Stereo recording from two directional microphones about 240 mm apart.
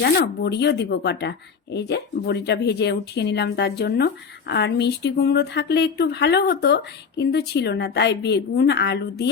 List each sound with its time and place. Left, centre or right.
0.0 s speech: left